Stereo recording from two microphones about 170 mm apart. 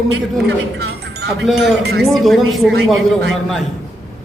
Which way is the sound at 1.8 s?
75° right (ahead or behind).